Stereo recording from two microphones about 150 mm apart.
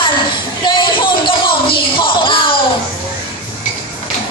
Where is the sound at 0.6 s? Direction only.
30° left (ahead or behind).